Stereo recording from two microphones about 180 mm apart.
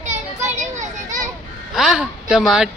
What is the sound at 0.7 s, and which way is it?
Children playing, 45° right (ahead or behind).